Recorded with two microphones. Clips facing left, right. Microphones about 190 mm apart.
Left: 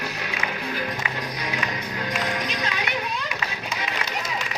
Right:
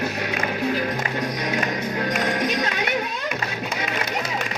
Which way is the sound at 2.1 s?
50° right (ahead or behind).